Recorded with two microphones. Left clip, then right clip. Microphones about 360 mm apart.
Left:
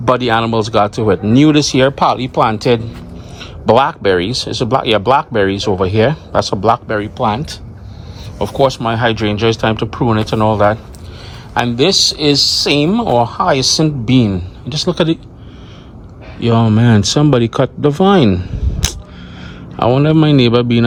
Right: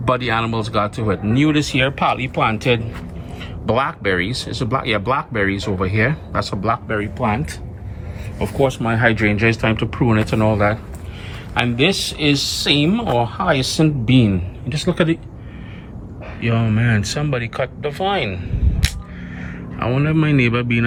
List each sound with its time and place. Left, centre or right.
0.0 s speech: centre
8.6 s speech: centre
11.9 s speech: left
12.6 s speech: centre
16.4 s speech: centre
20.0 s speech: centre